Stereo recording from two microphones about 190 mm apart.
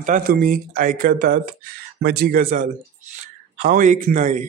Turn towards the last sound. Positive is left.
turn(degrees=-40)  # may be behind; listen again after turning